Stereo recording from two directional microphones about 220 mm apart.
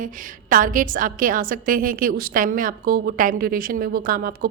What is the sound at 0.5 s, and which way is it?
A woman's voice, 40° right (ahead or behind).